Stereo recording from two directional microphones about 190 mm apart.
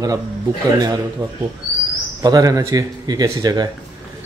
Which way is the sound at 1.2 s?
15° right (ahead or behind).